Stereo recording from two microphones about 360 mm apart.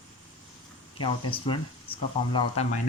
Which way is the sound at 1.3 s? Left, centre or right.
Centre.